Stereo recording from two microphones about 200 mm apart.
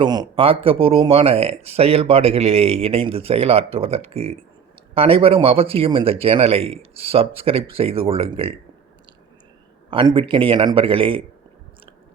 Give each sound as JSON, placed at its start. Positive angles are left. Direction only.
{"t": 0.0, "sound": "speech", "side_deg": -20}
{"t": 9.9, "sound": "speech", "side_deg": -25}